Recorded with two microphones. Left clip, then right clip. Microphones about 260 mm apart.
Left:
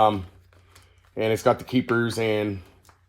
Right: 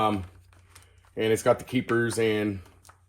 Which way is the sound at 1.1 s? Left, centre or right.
Left.